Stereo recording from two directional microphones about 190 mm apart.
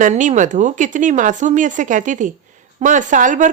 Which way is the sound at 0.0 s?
40° right (ahead or behind).